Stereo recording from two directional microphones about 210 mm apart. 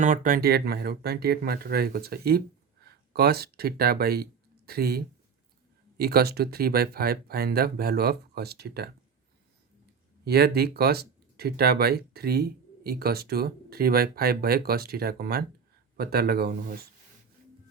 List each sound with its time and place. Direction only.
0.0 s speech: 40° right (ahead or behind)
10.2 s speech: 50° right (ahead or behind)